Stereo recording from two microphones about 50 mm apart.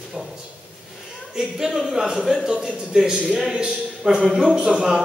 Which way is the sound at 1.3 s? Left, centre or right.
Centre.